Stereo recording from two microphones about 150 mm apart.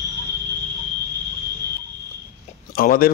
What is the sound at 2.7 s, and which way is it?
Speech, 75° left (ahead or behind).